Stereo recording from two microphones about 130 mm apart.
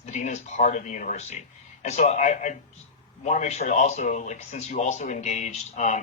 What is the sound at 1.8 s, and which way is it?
Speech, 55° left (ahead or behind).